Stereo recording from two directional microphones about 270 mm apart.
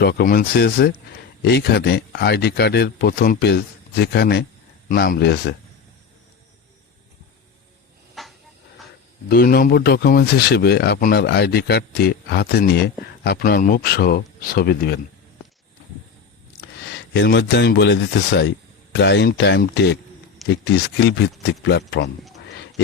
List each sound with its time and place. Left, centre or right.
0.0 s speech: left
8.2 s cupboard open or close: centre
9.3 s speech: left
17.2 s speech: left